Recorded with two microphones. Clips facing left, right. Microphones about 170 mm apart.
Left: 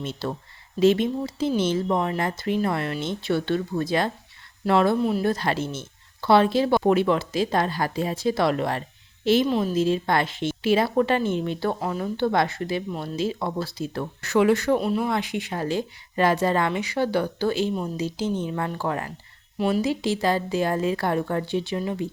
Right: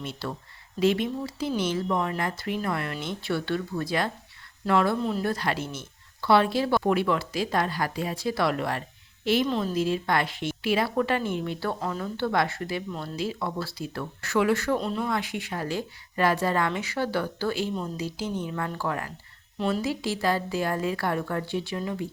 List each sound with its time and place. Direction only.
0.0 s speech: 25° left (ahead or behind)
9.5 s a woman's voice: 15° left (ahead or behind)
9.7 s speech: 25° left (ahead or behind); by 15.0 s 10° left (ahead or behind)
15.0 s speech: 20° left (ahead or behind)
19.5 s speech: 10° left (ahead or behind)